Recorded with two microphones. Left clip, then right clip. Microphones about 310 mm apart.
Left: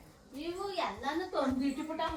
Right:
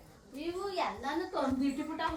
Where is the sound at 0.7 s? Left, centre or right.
Centre.